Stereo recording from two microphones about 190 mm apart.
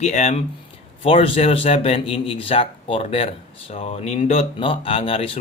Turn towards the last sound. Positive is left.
turn(degrees=30)  # may be behind; listen again after turning